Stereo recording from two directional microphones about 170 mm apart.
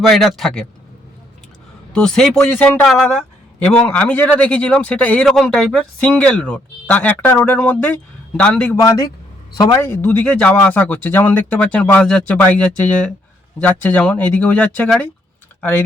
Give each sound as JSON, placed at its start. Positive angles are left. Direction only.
{"t": 0.1, "sound": "speech", "side_deg": 0}
{"t": 1.9, "sound": "speech", "side_deg": 5}
{"t": 8.8, "sound": "speech", "side_deg": 20}